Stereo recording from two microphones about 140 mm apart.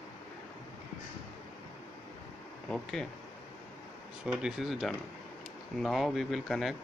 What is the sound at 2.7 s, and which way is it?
Speech, 5° left (ahead or behind).